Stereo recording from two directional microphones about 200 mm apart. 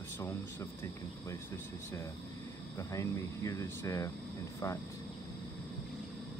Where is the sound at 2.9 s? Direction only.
15° left (ahead or behind).